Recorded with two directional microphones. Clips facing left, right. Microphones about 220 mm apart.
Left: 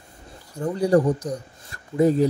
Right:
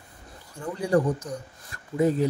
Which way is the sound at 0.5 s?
35° left (ahead or behind).